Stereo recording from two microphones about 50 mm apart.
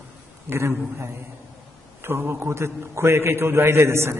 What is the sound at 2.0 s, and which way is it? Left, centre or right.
A man's voice, right.